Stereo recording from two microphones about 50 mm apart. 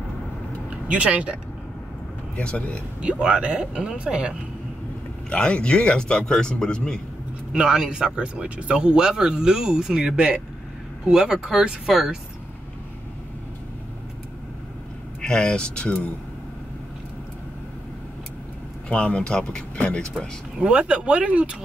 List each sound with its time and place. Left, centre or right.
0.7 s speech: right
2.3 s speech: left
3.0 s speech: right
5.3 s a man's voice: left
7.5 s speech: centre
8.2 s speech: right; by 12.2 s centre
15.2 s speech: centre
18.9 s speech: left
20.5 s speech: right